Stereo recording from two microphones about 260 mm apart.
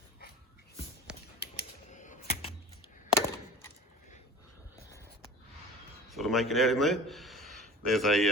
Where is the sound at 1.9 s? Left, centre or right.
Left.